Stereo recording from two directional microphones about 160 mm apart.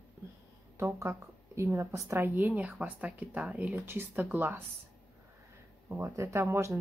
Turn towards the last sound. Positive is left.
turn(degrees=-15)  # may be behind; listen again after turning